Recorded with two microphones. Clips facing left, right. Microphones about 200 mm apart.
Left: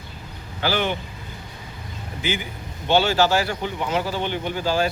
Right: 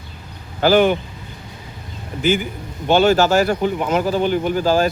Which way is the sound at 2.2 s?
45° right (ahead or behind).